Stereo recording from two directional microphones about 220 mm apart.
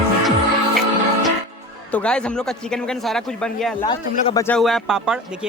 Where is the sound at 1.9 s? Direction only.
5° left (ahead or behind).